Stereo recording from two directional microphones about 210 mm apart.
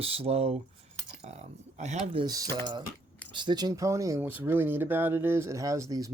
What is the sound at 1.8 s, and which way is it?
Speech, 30° right (ahead or behind).